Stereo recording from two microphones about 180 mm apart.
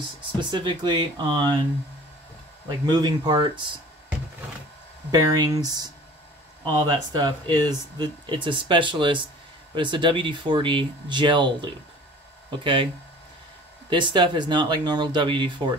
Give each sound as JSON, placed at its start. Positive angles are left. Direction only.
{"t": 0.5, "sound": "speech", "side_deg": -25}
{"t": 2.9, "sound": "speech", "side_deg": -25}
{"t": 5.1, "sound": "speech", "side_deg": -20}
{"t": 13.8, "sound": "speech", "side_deg": -25}